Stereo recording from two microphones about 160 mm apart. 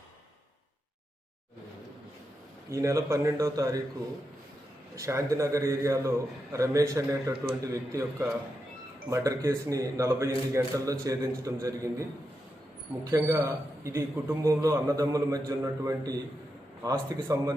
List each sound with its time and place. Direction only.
2.6 s a man's voice: 20° right (ahead or behind)
4.9 s a man's voice: 20° right (ahead or behind)
13.1 s a man's voice: 15° right (ahead or behind)